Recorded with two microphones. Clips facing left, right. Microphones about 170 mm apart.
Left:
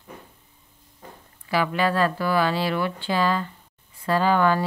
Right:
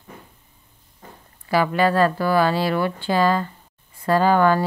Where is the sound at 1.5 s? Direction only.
45° right (ahead or behind).